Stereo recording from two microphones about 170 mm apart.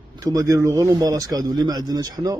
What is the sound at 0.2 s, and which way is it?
A man's voice, 20° right (ahead or behind).